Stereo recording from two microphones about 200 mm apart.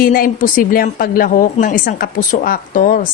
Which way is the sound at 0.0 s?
45° left (ahead or behind).